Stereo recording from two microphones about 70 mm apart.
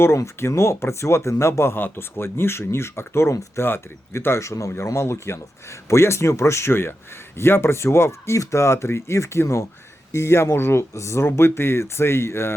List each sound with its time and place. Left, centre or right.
0.0 s speech: left